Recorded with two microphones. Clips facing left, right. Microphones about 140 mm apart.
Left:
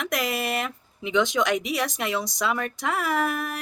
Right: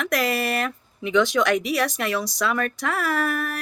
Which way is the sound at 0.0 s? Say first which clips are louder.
Right 3 dB; 20° left (ahead or behind).